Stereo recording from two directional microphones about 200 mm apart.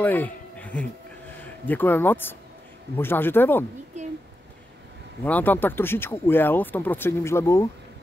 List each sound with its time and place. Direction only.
0.0 s music: 10° left (ahead or behind)
1.4 s speech: 10° left (ahead or behind)
3.9 s a sound: 35° right (ahead or behind)
5.2 s speech: 10° left (ahead or behind)